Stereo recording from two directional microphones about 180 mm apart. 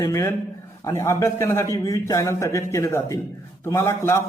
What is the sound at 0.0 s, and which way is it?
A man's voice, 15° left (ahead or behind).